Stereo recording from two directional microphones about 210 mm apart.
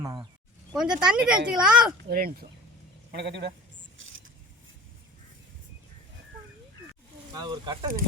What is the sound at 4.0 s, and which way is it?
Vehicle, 65° right (ahead or behind).